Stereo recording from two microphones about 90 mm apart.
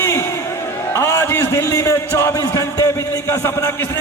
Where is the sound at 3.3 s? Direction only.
30° left (ahead or behind).